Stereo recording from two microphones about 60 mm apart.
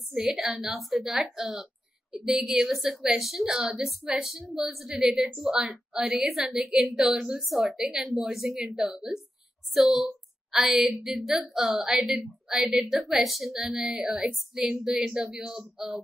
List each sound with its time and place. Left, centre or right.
0.1 s a woman's voice: centre
7.2 s speech: centre
7.4 s a woman's voice: centre